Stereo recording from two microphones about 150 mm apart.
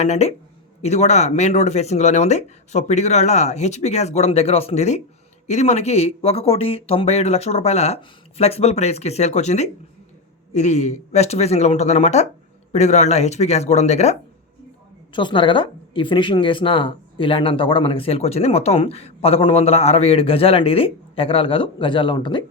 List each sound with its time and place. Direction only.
0.0 s speech: 45° left (ahead or behind)
15.1 s a woman's voice: 35° left (ahead or behind)